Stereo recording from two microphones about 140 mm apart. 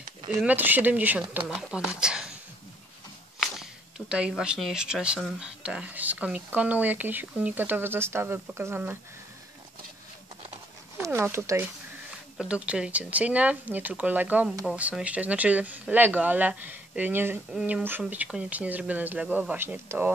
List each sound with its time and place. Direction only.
0.4 s speech: 10° right (ahead or behind)
4.1 s speech: 5° right (ahead or behind)
11.0 s speech: 15° right (ahead or behind)
17.6 s speech: 5° right (ahead or behind)